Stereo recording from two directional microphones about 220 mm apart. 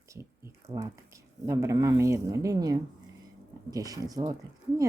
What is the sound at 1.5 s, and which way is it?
Speech, 15° right (ahead or behind).